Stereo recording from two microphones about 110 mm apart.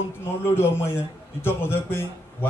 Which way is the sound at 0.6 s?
20° left (ahead or behind).